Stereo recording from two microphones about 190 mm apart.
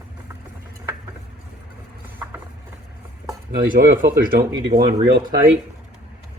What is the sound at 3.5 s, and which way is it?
Chopping, 50° right (ahead or behind).